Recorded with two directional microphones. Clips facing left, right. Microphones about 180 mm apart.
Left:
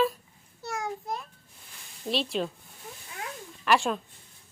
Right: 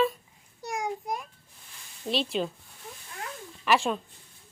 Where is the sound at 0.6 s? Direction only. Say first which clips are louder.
Right 2 dB; 15° right (ahead or behind).